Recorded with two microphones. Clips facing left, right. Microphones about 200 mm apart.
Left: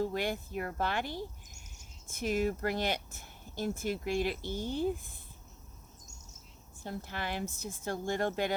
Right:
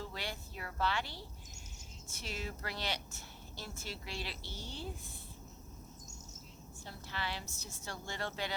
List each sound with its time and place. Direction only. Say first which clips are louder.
0.0 s speech: left 11 dB; 50° left (ahead or behind)
6.8 s speech: left 5 dB; 50° left (ahead or behind)